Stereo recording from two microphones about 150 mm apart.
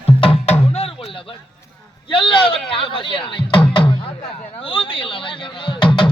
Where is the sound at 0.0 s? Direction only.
40° left (ahead or behind).